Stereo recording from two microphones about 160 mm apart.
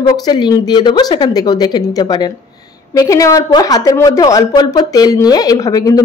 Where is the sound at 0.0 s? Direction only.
25° left (ahead or behind).